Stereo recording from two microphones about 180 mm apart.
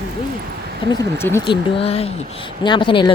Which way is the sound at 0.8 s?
30° left (ahead or behind).